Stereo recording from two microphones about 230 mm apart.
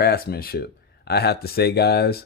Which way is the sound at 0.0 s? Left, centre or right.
Left.